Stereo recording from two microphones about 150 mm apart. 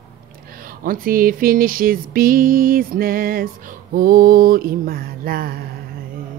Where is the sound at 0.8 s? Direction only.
70° right (ahead or behind).